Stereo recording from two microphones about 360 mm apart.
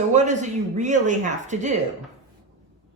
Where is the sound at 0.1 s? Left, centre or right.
Centre.